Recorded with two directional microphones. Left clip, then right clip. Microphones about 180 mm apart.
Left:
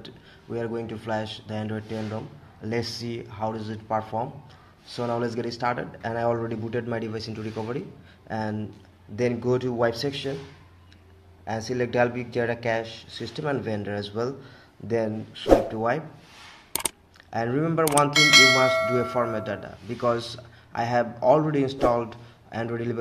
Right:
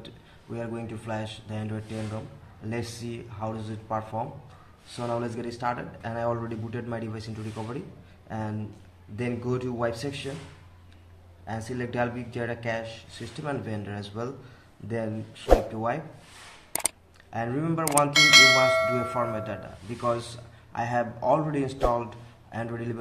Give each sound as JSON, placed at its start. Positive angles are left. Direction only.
{"t": 0.0, "sound": "a man's voice", "side_deg": 30}
{"t": 11.4, "sound": "speech", "side_deg": 35}
{"t": 17.3, "sound": "a man's voice", "side_deg": 30}
{"t": 18.1, "sound": "speech", "side_deg": 0}
{"t": 19.3, "sound": "a man's voice", "side_deg": 30}